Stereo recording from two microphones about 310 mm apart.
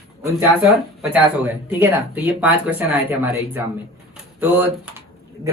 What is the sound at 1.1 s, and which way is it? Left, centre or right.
Speech, centre.